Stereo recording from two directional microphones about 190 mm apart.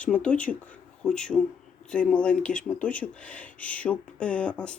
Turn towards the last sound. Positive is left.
turn(degrees=5)  # may be behind; listen again after turning